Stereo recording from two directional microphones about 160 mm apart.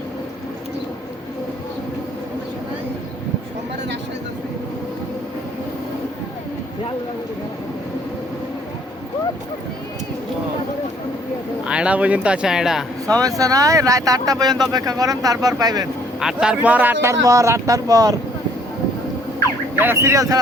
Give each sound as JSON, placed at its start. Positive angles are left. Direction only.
{"t": 11.6, "sound": "speech", "side_deg": -5}
{"t": 13.1, "sound": "speech", "side_deg": -20}
{"t": 16.2, "sound": "speech", "side_deg": -5}
{"t": 19.8, "sound": "speech", "side_deg": -15}